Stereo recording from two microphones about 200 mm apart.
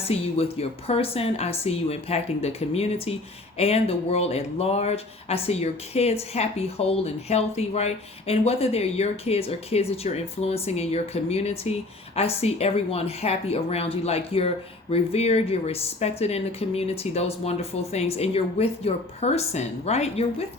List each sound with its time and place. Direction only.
0.0 s speech: 30° left (ahead or behind)